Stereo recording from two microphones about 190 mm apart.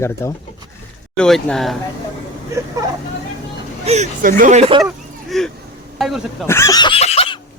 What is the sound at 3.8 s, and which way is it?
Speech, 35° right (ahead or behind).